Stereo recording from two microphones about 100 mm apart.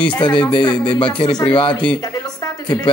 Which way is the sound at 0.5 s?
55° left (ahead or behind).